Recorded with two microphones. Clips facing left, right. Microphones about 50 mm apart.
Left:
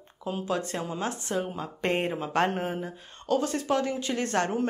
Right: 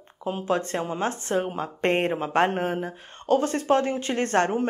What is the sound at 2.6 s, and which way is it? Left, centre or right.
Speech, right.